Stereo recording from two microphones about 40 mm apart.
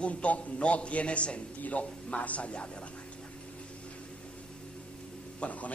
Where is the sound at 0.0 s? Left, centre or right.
Left.